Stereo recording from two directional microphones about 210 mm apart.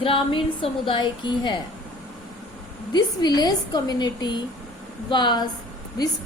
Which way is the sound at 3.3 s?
20° left (ahead or behind).